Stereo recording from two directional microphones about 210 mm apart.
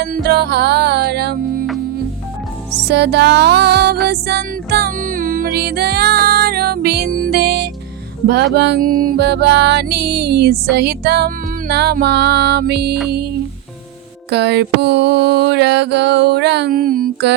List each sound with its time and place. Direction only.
0.0 s mantra: 50° right (ahead or behind)
2.8 s mantra: 50° right (ahead or behind)
4.0 s music: 50° right (ahead or behind)
8.5 s mantra: 50° right (ahead or behind)
14.3 s mantra: 55° right (ahead or behind)